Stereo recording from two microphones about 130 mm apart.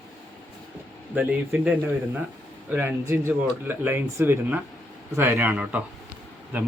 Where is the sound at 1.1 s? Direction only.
15° right (ahead or behind).